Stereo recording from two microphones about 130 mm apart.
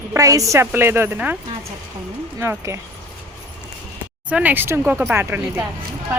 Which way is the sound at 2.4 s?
20° right (ahead or behind).